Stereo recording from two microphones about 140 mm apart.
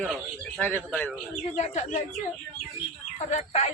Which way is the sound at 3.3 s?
55° left (ahead or behind).